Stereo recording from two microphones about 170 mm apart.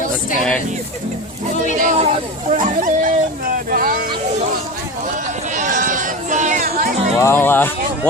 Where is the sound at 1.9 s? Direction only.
40° right (ahead or behind); by 4.1 s 60° right (ahead or behind).